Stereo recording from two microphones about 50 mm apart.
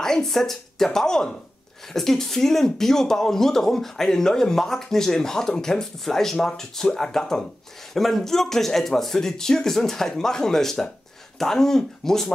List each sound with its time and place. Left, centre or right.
0.0 s a woman's voice: centre